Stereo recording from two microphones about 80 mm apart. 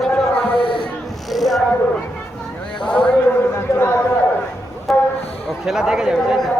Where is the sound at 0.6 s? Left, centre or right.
Left.